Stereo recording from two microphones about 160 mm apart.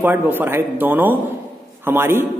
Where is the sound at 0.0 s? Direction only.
10° right (ahead or behind).